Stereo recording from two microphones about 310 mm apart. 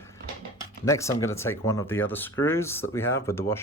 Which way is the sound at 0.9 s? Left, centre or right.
Centre.